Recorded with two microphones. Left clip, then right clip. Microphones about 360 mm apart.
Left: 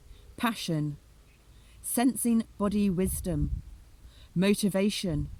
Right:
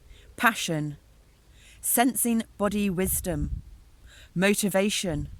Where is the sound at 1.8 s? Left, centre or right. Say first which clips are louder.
Right 4 dB; centre.